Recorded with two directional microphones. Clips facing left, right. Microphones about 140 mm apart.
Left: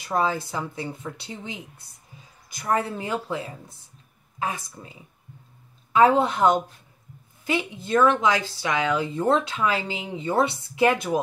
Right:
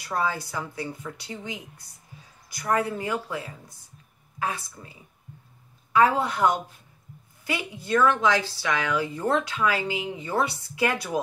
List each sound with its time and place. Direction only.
0.0 s a woman's voice: 20° left (ahead or behind)
5.9 s a woman's voice: 25° left (ahead or behind)